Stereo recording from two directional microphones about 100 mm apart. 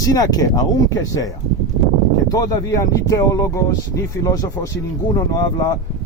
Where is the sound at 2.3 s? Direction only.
40° left (ahead or behind).